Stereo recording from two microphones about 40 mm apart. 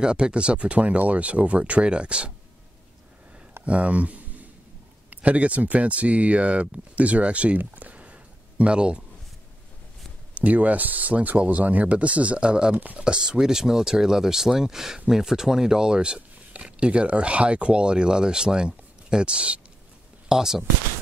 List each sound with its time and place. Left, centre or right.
0.0 s speech: right
3.6 s a sound: right
5.1 s speech: right
7.5 s a sound: right
10.3 s speech: right
20.2 s speech: centre